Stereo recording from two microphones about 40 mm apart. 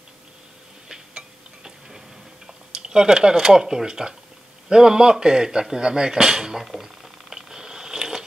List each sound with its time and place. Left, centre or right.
1.9 s tick-tock: centre
2.8 s speech: centre
6.6 s a sound: centre